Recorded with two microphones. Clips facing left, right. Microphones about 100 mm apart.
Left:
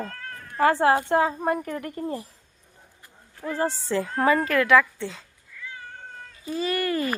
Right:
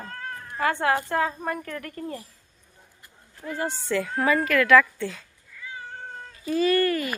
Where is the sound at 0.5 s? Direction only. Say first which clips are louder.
Left 4 dB; 35° left (ahead or behind).